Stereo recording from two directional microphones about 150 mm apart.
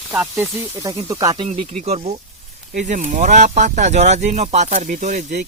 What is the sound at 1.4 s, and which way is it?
Speech, 40° right (ahead or behind).